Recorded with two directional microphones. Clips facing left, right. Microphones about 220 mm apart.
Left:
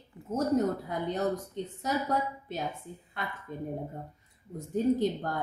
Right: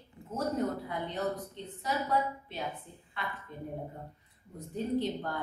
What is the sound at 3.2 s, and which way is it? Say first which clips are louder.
Speech: left 2 dB; 45° left (ahead or behind).